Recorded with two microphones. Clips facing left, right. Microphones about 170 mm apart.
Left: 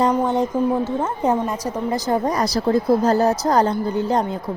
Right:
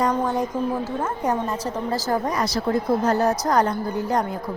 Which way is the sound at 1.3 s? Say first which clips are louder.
Left 2 dB; 10° left (ahead or behind).